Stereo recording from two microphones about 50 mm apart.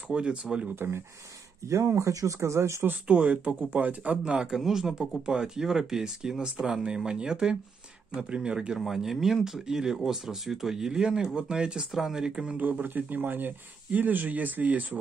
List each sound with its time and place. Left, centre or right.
0.1 s speech: centre
0.7 s speech: right
1.7 s speech: right
3.1 s speech: right
4.6 s speech: centre
8.7 s speech: centre
11.9 s speech: centre
12.5 s speech: right